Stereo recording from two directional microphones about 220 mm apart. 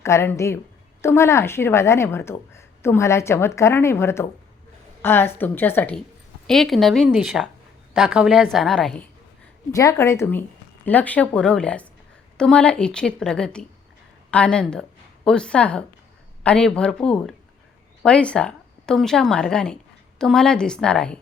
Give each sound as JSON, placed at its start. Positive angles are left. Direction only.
{"t": 0.0, "sound": "a woman's voice", "side_deg": 10}
{"t": 9.7, "sound": "a woman's voice", "side_deg": 15}